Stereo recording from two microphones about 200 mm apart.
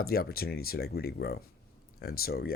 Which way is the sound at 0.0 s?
50° left (ahead or behind).